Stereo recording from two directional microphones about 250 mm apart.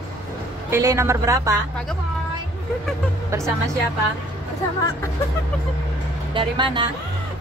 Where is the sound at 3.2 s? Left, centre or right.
Centre.